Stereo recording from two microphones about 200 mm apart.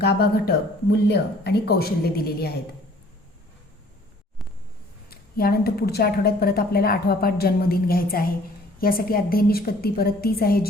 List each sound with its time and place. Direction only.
0.0 s a woman's voice: 50° left (ahead or behind)
5.0 s a woman's voice: 50° left (ahead or behind)